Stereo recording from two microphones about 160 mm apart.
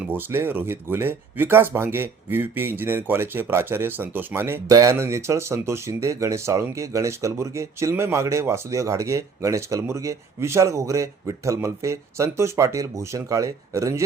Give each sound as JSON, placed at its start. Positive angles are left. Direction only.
{"t": 0.0, "sound": "speech", "side_deg": -10}